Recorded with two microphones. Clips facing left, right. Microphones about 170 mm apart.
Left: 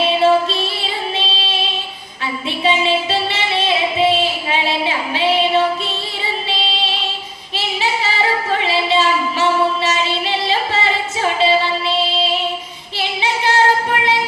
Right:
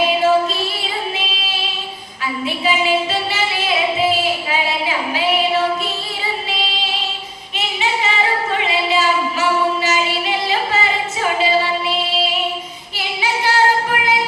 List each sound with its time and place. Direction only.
0.2 s music: 30° left (ahead or behind)
2.6 s female singing: 30° left (ahead or behind)
8.6 s singing: 30° left (ahead or behind)
13.9 s music: 30° left (ahead or behind)